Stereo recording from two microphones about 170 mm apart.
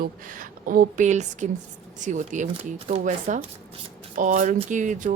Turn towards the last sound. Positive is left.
turn(degrees=-50)  # may be behind; listen again after turning